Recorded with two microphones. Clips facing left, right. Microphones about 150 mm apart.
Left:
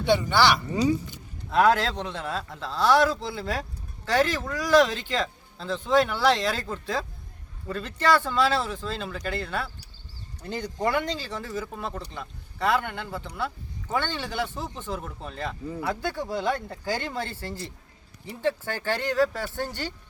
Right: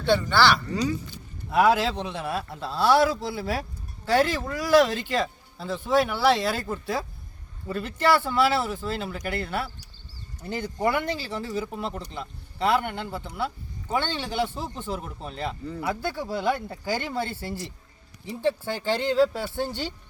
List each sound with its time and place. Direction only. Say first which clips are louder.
0.0 s speech: even; 15° left (ahead or behind)
1.5 s speech: even; 5° right (ahead or behind)